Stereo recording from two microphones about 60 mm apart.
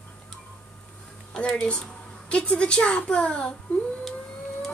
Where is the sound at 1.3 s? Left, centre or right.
Centre.